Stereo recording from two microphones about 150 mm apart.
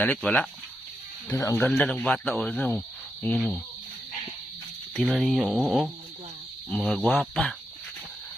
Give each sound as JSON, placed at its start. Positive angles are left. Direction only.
{"t": 0.0, "sound": "speech", "side_deg": 10}
{"t": 1.6, "sound": "speech", "side_deg": 5}
{"t": 3.3, "sound": "speech", "side_deg": 0}
{"t": 4.9, "sound": "speech", "side_deg": 0}